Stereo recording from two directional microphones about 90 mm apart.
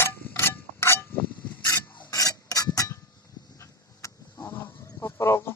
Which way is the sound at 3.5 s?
35° left (ahead or behind).